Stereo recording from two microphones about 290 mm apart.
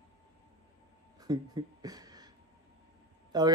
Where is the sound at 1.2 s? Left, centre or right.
Centre.